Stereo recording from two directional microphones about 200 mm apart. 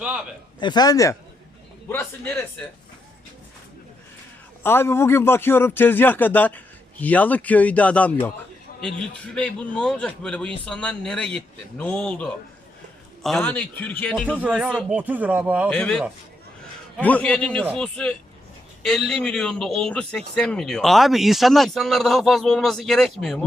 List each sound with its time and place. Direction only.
0.6 s a man's voice: 20° left (ahead or behind)
4.6 s a man's voice: 10° left (ahead or behind)
14.3 s speech: 5° right (ahead or behind)
15.7 s a man's voice: 5° left (ahead or behind)